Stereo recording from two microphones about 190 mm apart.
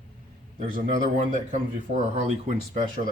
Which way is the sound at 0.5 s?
40° right (ahead or behind).